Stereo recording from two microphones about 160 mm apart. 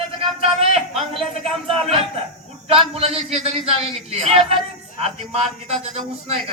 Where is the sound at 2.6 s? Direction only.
35° right (ahead or behind).